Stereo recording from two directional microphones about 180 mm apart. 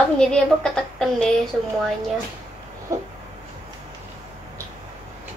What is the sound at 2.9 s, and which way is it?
Speech, 15° right (ahead or behind).